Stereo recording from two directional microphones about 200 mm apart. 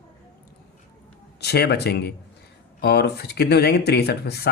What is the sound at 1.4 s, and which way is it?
Speech, 55° left (ahead or behind).